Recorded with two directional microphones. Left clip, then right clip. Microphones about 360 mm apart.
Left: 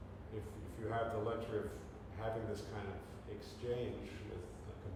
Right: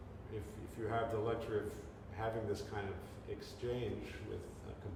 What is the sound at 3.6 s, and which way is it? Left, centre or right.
Speech, centre.